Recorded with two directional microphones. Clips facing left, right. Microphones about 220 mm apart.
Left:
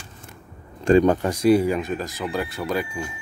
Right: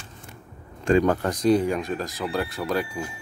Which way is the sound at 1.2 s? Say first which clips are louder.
Left 3 dB; 10° left (ahead or behind).